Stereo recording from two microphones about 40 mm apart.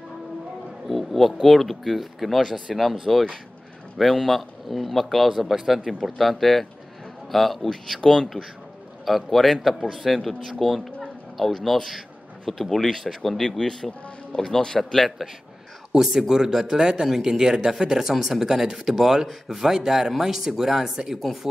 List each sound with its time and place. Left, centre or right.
0.8 s speech: centre
9.0 s speech: centre
14.8 s speech: centre
15.9 s speech: centre